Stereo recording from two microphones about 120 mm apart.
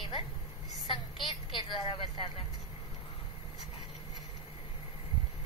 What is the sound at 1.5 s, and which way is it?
Speech, 40° left (ahead or behind).